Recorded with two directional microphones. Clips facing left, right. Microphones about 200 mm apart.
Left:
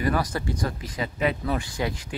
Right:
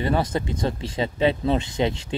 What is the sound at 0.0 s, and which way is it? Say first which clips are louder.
Speech: right 2 dB; 25° right (ahead or behind).